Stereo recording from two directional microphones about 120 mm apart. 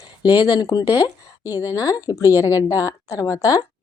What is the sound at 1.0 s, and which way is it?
Speech, 15° right (ahead or behind).